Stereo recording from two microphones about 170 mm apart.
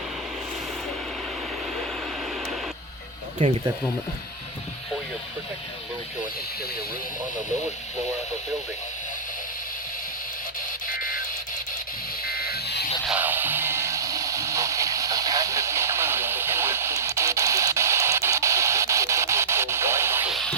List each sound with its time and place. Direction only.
3.4 s speech: 35° right (ahead or behind)
10.8 s alarm clock: 55° left (ahead or behind)
12.2 s a sound: 60° left (ahead or behind)
13.1 s music: 10° right (ahead or behind)
20.3 s music: 5° left (ahead or behind)